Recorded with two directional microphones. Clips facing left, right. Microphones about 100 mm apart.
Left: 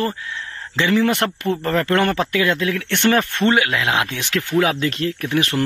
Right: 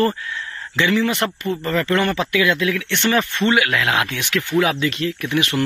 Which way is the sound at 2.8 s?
50° left (ahead or behind).